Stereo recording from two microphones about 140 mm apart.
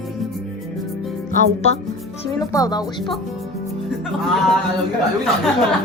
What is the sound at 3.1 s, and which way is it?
Music, centre (ahead or behind).